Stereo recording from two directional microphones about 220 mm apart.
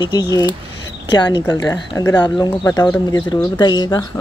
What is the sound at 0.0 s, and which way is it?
Speech, 15° left (ahead or behind).